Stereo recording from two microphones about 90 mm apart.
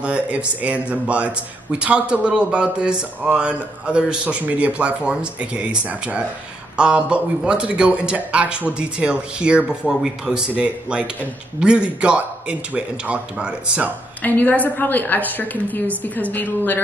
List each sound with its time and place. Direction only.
0.0 s a man's voice: 15° right (ahead or behind)
14.2 s a woman's voice: 20° left (ahead or behind)